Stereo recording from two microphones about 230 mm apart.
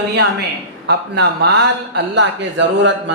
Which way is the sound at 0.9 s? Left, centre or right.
Right.